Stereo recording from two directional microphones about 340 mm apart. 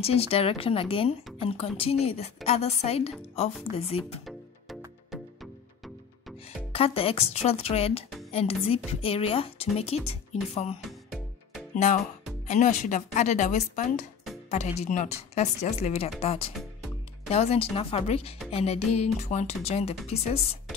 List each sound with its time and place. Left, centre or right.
0.0 s speech: centre
4.3 s music: centre
6.7 s speech: centre